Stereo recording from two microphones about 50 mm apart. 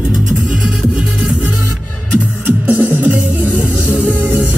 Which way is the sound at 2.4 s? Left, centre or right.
Right.